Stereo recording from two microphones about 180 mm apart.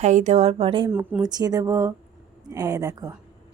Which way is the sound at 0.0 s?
40° right (ahead or behind).